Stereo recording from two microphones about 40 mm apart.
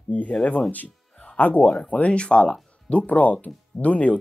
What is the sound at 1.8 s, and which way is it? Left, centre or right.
Speech, left.